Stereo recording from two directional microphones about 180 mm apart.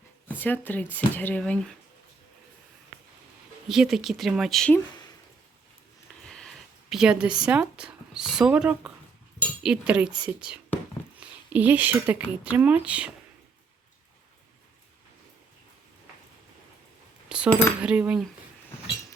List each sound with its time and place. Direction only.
0.3 s speech: 10° left (ahead or behind)
3.7 s speech: centre (ahead or behind)
6.2 s speech: 5° left (ahead or behind)
17.2 s cutlery: 5° right (ahead or behind)
17.5 s speech: 15° left (ahead or behind)
17.7 s speech: 5° right (ahead or behind)